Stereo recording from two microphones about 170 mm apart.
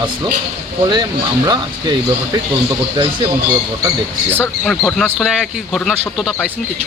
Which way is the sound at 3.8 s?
10° right (ahead or behind).